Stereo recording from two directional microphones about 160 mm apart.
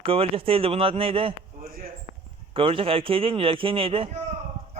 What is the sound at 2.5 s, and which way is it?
A man's voice, 35° right (ahead or behind).